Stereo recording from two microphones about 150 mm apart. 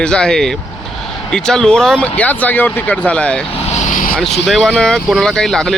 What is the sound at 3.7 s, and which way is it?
Vehicle, 60° left (ahead or behind).